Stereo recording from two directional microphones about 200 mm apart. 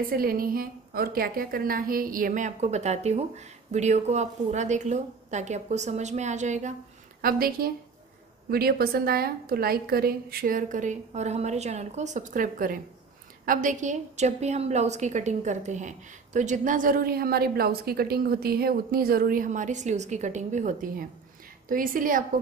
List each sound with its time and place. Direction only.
0.0 s a woman's voice: 45° right (ahead or behind)
7.2 s a woman's voice: 45° right (ahead or behind)